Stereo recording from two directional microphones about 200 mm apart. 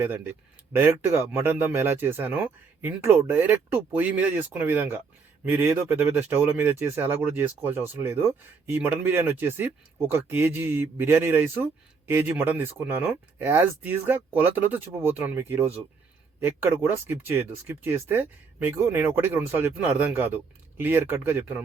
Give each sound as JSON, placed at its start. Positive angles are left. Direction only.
{"t": 0.0, "sound": "speech", "side_deg": -10}